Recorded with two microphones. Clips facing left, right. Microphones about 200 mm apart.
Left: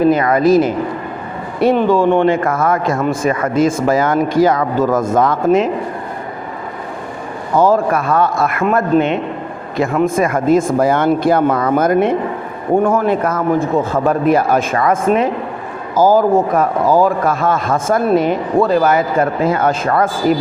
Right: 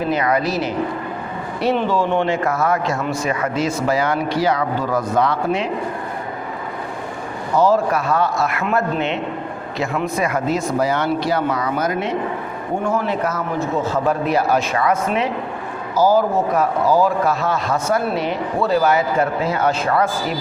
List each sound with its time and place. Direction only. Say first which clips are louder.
0.0 s a man's voice: left 7 dB; 50° left (ahead or behind)
7.5 s a man's voice: left 3 dB; 50° left (ahead or behind)